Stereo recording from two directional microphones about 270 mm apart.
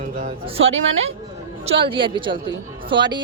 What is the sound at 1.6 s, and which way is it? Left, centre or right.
A man's voice, centre.